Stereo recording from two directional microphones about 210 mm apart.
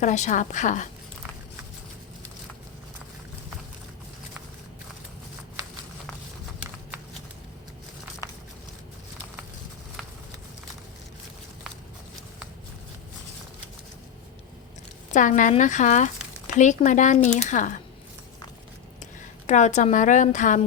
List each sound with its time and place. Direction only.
0.0 s speech: 35° left (ahead or behind)
15.1 s speech: 35° left (ahead or behind)
19.5 s speech: 35° left (ahead or behind)